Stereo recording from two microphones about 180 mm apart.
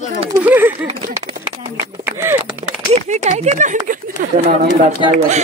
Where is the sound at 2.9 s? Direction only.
40° right (ahead or behind).